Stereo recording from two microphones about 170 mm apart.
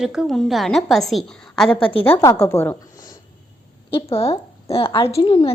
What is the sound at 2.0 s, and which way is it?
Speech, 15° left (ahead or behind).